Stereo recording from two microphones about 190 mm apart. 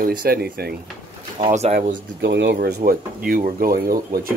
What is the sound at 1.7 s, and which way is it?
Speech, 45° right (ahead or behind).